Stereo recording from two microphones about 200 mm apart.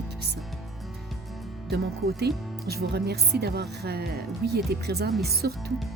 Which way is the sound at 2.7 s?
55° right (ahead or behind).